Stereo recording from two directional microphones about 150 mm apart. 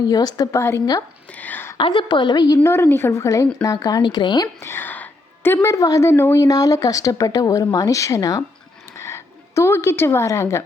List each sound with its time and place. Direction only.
0.1 s a woman's voice: 25° left (ahead or behind)
1.3 s a sound: 10° left (ahead or behind)
1.8 s a woman's voice: 35° left (ahead or behind)
2.6 s a woman's voice: 15° left (ahead or behind)
4.6 s a woman's voice: 15° left (ahead or behind)
8.9 s a sound: 20° left (ahead or behind)